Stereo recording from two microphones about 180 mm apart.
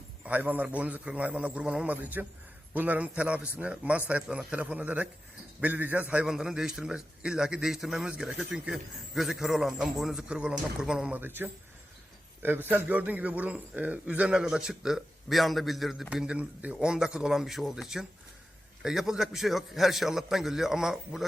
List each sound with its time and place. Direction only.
0.3 s a man's voice: 10° right (ahead or behind)
12.7 s a man's voice: 10° right (ahead or behind)